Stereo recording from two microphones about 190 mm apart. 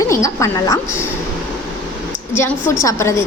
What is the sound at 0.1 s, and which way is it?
Speech, 15° left (ahead or behind).